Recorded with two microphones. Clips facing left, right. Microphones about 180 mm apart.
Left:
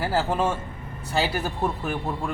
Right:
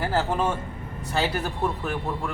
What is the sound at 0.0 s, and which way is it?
Speech, 10° left (ahead or behind).